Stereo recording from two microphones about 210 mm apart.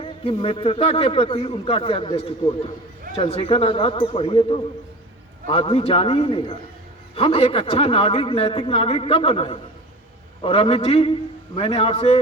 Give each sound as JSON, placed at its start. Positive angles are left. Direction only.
{"t": 0.0, "sound": "a man's voice", "side_deg": 25}